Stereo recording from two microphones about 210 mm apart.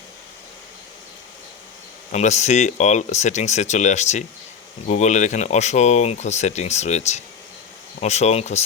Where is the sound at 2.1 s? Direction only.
35° left (ahead or behind).